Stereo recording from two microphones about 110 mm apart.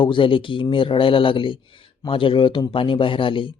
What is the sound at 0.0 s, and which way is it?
Speech, 50° left (ahead or behind).